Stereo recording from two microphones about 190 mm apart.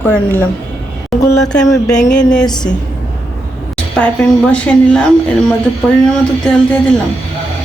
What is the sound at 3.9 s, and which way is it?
A woman's voice, 5° left (ahead or behind).